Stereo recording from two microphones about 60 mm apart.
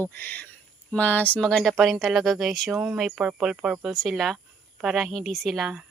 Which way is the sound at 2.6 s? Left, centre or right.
Centre.